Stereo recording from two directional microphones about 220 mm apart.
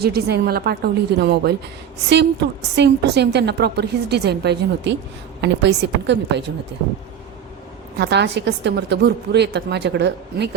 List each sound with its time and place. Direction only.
0.0 s a woman's voice: 45° right (ahead or behind)
7.9 s a woman's voice: 50° right (ahead or behind)